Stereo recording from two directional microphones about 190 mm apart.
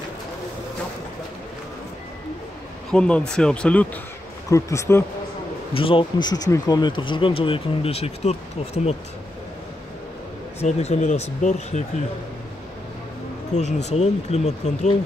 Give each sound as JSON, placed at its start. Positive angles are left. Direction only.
{"t": 2.9, "sound": "speech", "side_deg": 5}
{"t": 5.7, "sound": "speech", "side_deg": 30}
{"t": 10.6, "sound": "speech", "side_deg": 35}
{"t": 13.5, "sound": "speech", "side_deg": 35}